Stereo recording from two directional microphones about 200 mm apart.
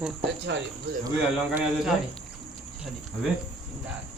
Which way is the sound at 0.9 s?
55° right (ahead or behind).